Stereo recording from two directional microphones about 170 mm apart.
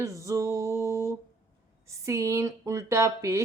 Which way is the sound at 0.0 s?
20° right (ahead or behind).